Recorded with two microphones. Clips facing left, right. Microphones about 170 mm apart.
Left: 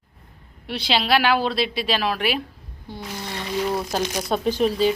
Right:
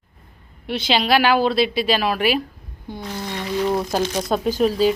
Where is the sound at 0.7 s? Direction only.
Centre (ahead or behind).